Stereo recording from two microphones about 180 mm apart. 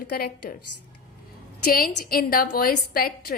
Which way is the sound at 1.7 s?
55° left (ahead or behind).